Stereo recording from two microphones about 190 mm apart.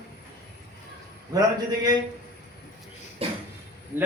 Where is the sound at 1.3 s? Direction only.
20° right (ahead or behind).